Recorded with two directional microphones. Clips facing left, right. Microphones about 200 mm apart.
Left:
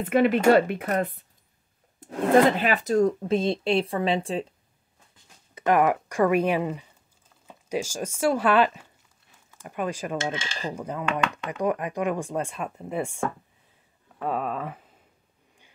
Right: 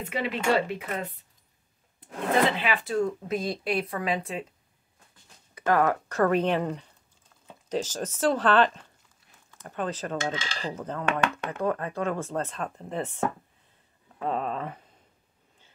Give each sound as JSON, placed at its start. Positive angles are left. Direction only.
{"t": 0.0, "sound": "speech", "side_deg": 55}
{"t": 5.5, "sound": "speech", "side_deg": 15}